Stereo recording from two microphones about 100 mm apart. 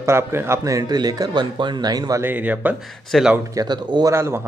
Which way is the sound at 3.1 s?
Centre (ahead or behind).